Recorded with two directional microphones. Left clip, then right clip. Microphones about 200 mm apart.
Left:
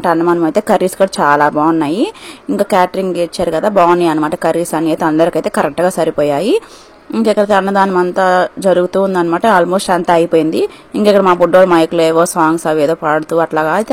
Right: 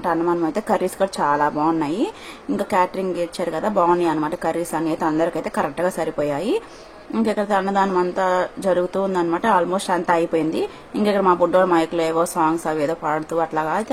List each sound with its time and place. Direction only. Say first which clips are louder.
0.0 s speech: left 8 dB; 35° left (ahead or behind)